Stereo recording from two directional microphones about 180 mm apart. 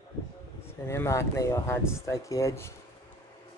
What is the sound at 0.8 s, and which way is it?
Speech, 15° left (ahead or behind).